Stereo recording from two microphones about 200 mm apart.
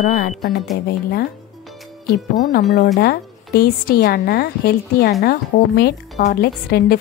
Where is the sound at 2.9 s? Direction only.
50° left (ahead or behind).